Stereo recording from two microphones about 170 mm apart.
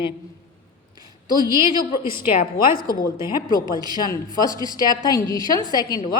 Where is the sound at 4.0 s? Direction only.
20° left (ahead or behind).